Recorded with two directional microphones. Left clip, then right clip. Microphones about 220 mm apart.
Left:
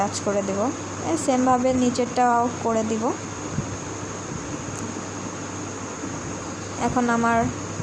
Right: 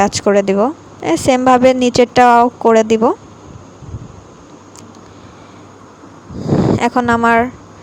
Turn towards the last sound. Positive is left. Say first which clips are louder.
# right 9 dB
turn(degrees=-40)  # may be behind; listen again after turning